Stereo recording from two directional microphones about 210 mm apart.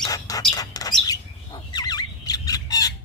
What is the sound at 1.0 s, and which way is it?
Squawk, 20° left (ahead or behind).